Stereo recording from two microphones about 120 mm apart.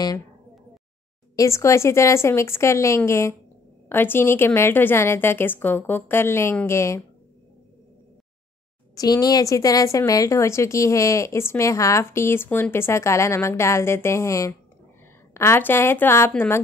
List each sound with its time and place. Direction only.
1.3 s a woman's voice: 25° left (ahead or behind)
8.9 s a woman's voice: 30° left (ahead or behind)